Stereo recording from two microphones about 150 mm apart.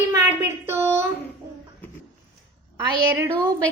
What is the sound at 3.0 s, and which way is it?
Speech, 20° right (ahead or behind).